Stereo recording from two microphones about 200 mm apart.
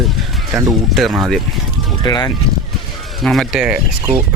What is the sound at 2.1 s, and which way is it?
Speech, 20° left (ahead or behind).